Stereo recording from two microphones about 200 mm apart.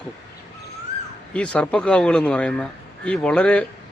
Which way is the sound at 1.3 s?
5° left (ahead or behind).